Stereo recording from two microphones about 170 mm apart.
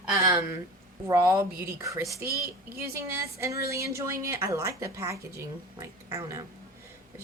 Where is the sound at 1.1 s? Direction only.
15° right (ahead or behind).